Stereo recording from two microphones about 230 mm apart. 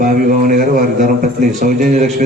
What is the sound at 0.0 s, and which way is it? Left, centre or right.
A man's voice, right.